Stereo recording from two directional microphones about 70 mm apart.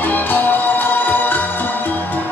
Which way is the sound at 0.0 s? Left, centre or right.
Left.